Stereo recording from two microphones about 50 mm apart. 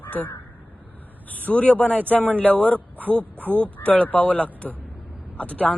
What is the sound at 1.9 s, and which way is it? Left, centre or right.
Speech, right.